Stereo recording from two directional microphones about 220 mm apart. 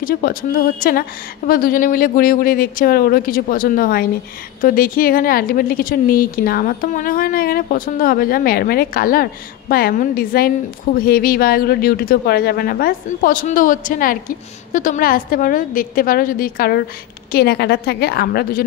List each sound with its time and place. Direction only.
0.0 s speech: 40° left (ahead or behind)